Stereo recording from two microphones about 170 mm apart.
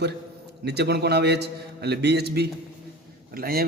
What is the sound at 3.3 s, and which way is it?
Speech, 60° right (ahead or behind).